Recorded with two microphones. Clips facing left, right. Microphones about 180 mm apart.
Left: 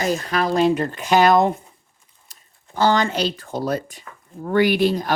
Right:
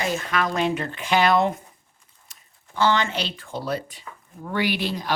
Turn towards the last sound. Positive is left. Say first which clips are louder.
# left 7 dB
turn(degrees=45)  # may be behind; listen again after turning